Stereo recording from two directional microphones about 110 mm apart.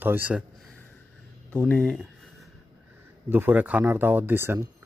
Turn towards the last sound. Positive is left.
turn(degrees=-20)  # may be behind; listen again after turning